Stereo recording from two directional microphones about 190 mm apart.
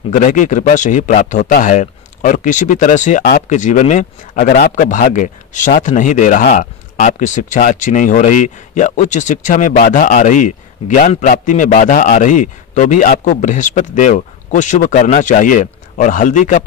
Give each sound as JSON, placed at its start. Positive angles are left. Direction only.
{"t": 0.1, "sound": "speech", "side_deg": 40}